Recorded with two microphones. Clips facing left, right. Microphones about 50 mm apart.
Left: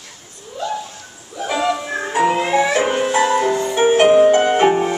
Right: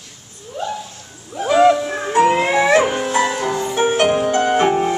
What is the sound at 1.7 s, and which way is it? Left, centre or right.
Music, centre.